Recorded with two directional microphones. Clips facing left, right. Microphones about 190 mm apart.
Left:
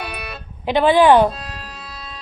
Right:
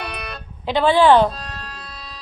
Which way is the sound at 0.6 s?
15° left (ahead or behind).